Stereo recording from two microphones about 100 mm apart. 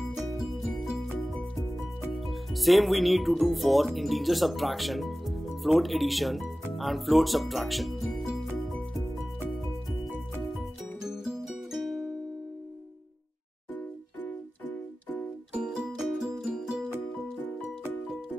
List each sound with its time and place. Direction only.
0.0 s music: centre (ahead or behind)
2.1 s speech: centre (ahead or behind)
11.0 s music: 5° right (ahead or behind)
14.2 s music: 15° left (ahead or behind)
15.5 s music: 10° right (ahead or behind)